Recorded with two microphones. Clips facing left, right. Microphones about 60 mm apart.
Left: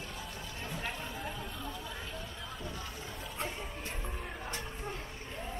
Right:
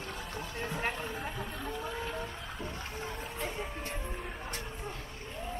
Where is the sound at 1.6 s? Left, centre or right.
Right.